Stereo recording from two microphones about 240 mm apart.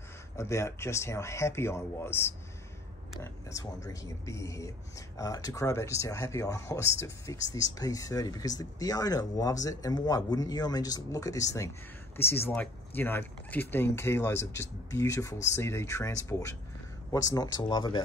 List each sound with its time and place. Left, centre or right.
0.4 s speech: centre